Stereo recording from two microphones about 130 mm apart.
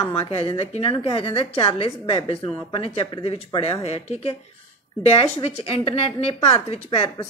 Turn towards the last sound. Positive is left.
turn(degrees=45)  # may be behind; listen again after turning